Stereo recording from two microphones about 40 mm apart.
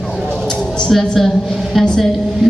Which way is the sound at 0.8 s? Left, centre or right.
Centre.